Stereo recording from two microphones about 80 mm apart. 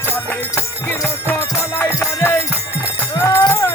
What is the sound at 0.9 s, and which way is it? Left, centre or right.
Music, left.